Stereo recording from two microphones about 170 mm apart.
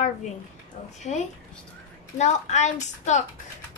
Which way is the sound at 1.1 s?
40° left (ahead or behind).